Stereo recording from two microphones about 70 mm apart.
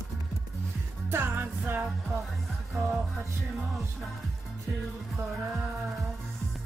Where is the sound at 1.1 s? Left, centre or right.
Right.